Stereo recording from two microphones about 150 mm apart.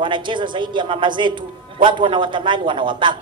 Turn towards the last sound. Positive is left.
turn(degrees=-30)  # may be behind; listen again after turning